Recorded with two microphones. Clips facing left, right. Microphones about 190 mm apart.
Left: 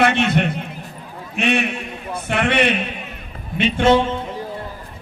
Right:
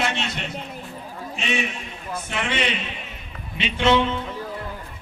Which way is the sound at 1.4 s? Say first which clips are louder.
Left 8 dB; 60° left (ahead or behind).